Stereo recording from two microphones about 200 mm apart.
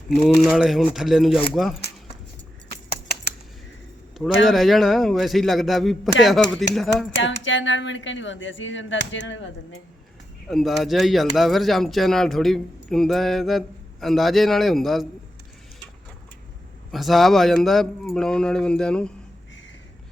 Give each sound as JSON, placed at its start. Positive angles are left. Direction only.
{"t": 0.2, "sound": "speech", "side_deg": 0}
{"t": 4.4, "sound": "speech", "side_deg": 0}
{"t": 7.2, "sound": "speech", "side_deg": 70}
{"t": 10.5, "sound": "speech", "side_deg": 0}
{"t": 16.9, "sound": "speech", "side_deg": 0}